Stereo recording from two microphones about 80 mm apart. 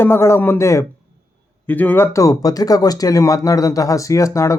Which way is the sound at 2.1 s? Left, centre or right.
Left.